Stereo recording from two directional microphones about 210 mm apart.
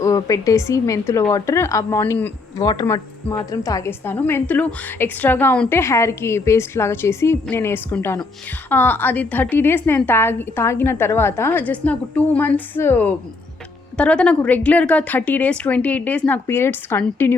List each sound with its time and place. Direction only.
0.0 s a woman's voice: 15° left (ahead or behind)